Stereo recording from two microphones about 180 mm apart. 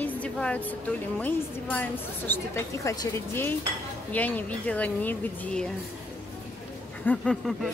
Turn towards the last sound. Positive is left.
turn(degrees=5)  # may be behind; listen again after turning